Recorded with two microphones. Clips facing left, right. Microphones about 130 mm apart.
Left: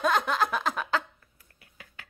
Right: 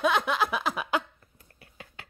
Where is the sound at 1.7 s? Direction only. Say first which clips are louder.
Right 3 dB; 25° right (ahead or behind).